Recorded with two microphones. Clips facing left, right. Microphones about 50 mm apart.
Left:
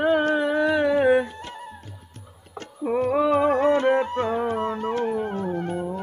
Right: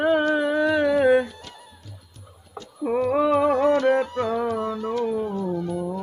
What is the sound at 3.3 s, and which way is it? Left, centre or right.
Music, left.